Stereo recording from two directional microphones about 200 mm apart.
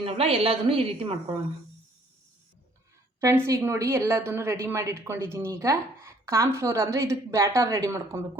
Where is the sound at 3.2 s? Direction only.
15° right (ahead or behind).